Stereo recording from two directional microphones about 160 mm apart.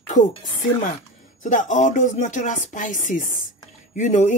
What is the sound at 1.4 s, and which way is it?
A woman's voice, 55° left (ahead or behind).